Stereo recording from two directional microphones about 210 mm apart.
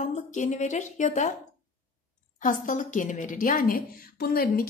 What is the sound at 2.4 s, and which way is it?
A woman's voice, 40° left (ahead or behind).